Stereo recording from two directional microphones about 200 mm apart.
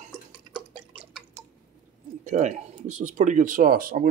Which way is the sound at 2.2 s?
35° right (ahead or behind).